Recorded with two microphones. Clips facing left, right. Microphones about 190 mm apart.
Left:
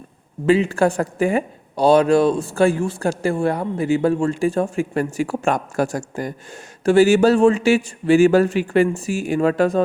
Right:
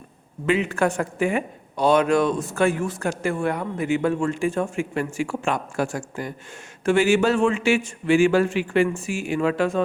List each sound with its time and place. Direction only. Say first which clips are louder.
0.4 s a man's voice: left 5 dB; 30° left (ahead or behind)